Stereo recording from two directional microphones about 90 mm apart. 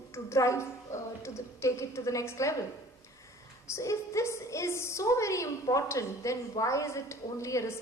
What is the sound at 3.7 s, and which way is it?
A woman's voice, 35° left (ahead or behind).